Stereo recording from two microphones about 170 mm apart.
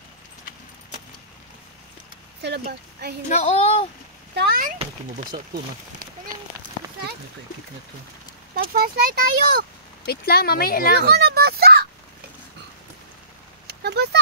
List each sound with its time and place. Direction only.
2.4 s speech: 75° right (ahead or behind)
3.3 s speech: 40° left (ahead or behind)
4.4 s speech: 60° right (ahead or behind)
5.3 s speech: 30° right (ahead or behind)
8.5 s speech: 60° right (ahead or behind)
10.0 s speech: 65° left (ahead or behind)
11.0 s a sound: 75° right (ahead or behind)
13.7 s a sound: 75° right (ahead or behind)